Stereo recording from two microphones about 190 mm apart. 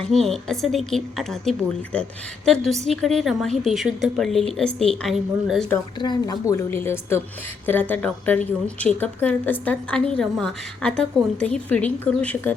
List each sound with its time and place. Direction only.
0.1 s speech: centre (ahead or behind)
6.0 s a woman's voice: 25° left (ahead or behind); by 12.5 s 5° left (ahead or behind)